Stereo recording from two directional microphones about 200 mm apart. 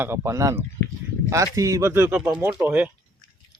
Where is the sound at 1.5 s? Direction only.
15° right (ahead or behind).